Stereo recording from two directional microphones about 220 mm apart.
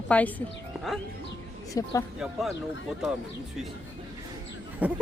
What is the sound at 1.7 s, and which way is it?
Speech, 15° left (ahead or behind).